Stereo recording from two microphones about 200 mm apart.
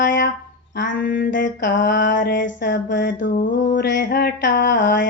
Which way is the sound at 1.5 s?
65° left (ahead or behind).